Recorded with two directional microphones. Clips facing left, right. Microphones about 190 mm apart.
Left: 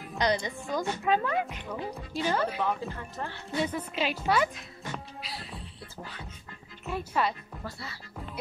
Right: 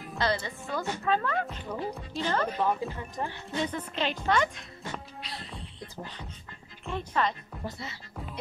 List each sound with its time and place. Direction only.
0.2 s a woman's voice: 15° left (ahead or behind)
2.6 s speech: 15° right (ahead or behind)
3.5 s a woman's voice: 10° left (ahead or behind)
6.9 s a woman's voice: 10° left (ahead or behind)
7.6 s speech: 20° right (ahead or behind)